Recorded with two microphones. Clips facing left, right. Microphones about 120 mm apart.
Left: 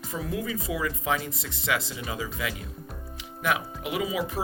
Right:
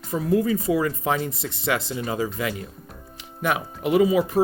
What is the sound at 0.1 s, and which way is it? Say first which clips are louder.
Speech: right 10 dB; 40° right (ahead or behind).